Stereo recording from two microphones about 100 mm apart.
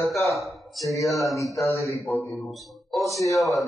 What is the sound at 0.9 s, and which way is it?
Speech, 35° left (ahead or behind).